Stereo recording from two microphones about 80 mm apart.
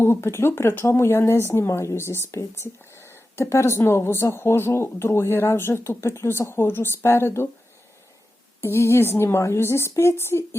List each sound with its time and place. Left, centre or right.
0.0 s speech: left
8.6 s speech: left